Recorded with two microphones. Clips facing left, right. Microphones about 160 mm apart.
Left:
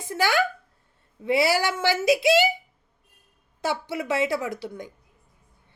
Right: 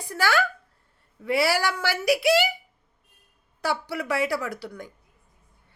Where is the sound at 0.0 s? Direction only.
20° left (ahead or behind).